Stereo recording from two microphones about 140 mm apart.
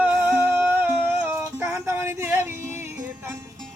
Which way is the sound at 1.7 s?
20° right (ahead or behind).